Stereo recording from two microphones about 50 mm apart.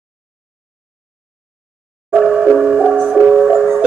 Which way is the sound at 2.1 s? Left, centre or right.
Centre.